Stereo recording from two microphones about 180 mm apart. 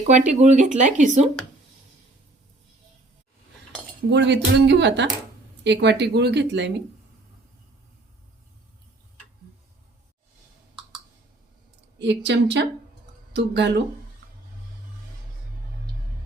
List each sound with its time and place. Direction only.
0.1 s speech: 40° right (ahead or behind)
4.1 s a woman's voice: 70° right (ahead or behind)
11.9 s a woman's voice: 75° right (ahead or behind)